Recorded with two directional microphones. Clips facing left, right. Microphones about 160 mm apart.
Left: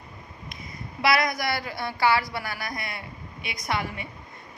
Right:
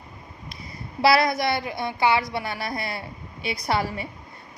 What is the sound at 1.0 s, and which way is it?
A woman's voice, 30° right (ahead or behind).